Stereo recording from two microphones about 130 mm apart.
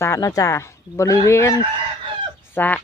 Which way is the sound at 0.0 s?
25° left (ahead or behind).